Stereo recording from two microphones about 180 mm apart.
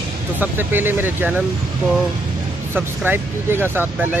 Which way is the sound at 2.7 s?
10° right (ahead or behind).